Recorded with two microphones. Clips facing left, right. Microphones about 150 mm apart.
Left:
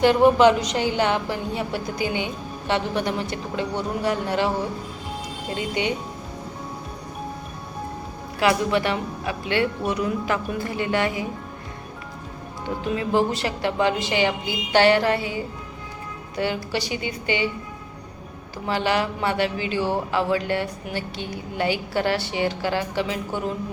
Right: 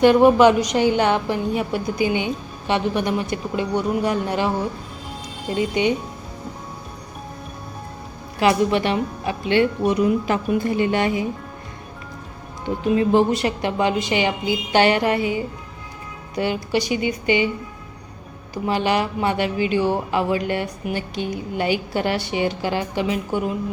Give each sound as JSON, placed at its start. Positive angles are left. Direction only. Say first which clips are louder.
{"t": 0.0, "sound": "a woman's voice", "louder": "right 3 dB", "side_deg": -15}
{"t": 5.5, "sound": "speech", "louder": "right 6 dB", "side_deg": -20}
{"t": 8.4, "sound": "speech", "louder": "right 3 dB", "side_deg": -20}
{"t": 13.0, "sound": "a woman's voice", "louder": "right 4 dB", "side_deg": -20}
{"t": 16.4, "sound": "a woman's voice", "louder": "right 4 dB", "side_deg": -15}
{"t": 18.5, "sound": "a woman's voice", "louder": "right 3 dB", "side_deg": -15}